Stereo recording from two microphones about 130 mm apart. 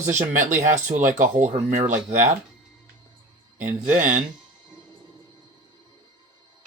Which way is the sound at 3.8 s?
85° right.